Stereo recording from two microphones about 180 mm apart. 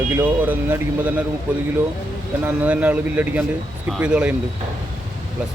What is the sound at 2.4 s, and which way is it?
Speech, 10° right (ahead or behind).